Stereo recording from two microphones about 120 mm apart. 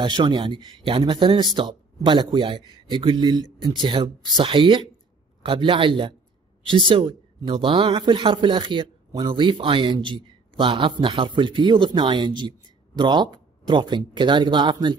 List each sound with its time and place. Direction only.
0.0 s a man's voice: 40° right (ahead or behind)